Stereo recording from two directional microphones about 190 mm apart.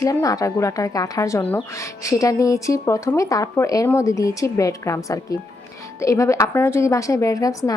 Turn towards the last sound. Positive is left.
turn(degrees=20)  # may be behind; listen again after turning